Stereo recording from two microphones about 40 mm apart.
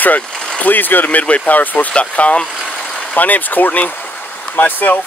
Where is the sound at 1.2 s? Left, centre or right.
Left.